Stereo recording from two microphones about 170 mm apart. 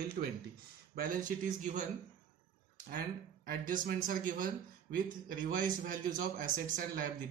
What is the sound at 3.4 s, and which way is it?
A man's voice, 55° right (ahead or behind).